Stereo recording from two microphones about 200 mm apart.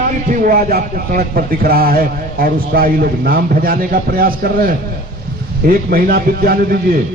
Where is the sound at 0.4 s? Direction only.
45° right (ahead or behind).